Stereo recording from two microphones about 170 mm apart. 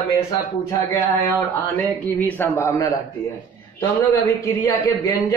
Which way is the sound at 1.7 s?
10° left (ahead or behind).